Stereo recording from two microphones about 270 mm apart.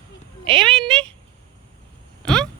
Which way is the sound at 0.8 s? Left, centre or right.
Centre.